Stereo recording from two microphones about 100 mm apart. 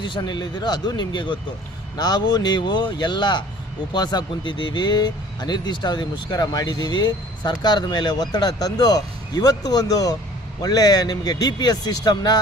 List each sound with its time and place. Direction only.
0.2 s speech: 45° left (ahead or behind)